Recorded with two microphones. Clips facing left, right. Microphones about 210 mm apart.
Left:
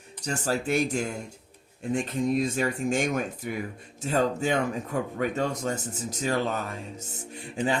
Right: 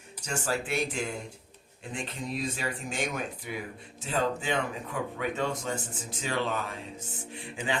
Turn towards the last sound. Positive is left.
turn(degrees=40)  # may be behind; listen again after turning